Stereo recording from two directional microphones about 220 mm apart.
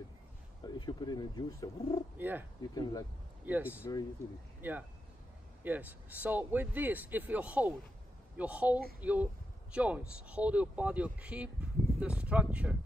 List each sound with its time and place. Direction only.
0.7 s speech: 20° left (ahead or behind)
2.1 s speech: 10° right (ahead or behind)
2.6 s speech: 15° left (ahead or behind)
3.4 s speech: 5° right (ahead or behind)